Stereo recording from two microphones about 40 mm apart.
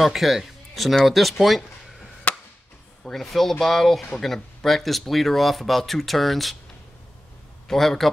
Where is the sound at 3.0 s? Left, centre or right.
Centre.